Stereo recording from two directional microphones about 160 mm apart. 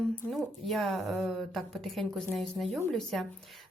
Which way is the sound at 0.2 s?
Centre (ahead or behind).